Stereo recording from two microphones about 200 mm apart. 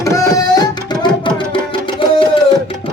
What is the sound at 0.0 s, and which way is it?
Tabla, 15° left (ahead or behind).